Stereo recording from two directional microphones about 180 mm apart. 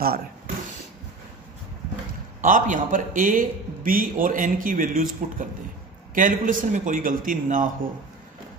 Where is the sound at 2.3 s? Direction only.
45° right (ahead or behind).